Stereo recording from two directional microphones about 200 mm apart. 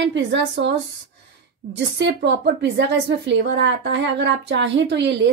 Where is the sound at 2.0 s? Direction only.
60° right (ahead or behind).